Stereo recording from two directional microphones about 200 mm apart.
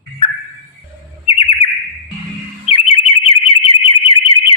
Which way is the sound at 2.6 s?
30° left (ahead or behind).